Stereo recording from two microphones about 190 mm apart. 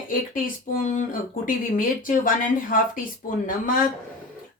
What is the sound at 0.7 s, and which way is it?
Speech, 40° left (ahead or behind).